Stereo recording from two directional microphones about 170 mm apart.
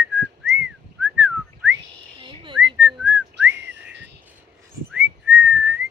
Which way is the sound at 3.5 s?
90° right.